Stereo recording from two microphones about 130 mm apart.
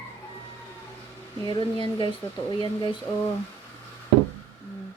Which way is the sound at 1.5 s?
40° left (ahead or behind).